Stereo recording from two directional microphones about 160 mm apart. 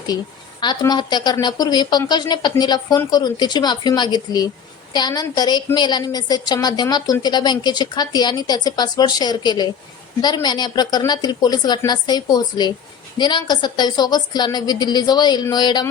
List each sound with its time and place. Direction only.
0.6 s a woman's voice: 25° left (ahead or behind)